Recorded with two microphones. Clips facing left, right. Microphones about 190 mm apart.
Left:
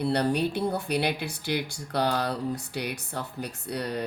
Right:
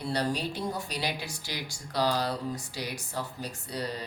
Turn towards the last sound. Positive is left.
turn(degrees=60)  # may be behind; listen again after turning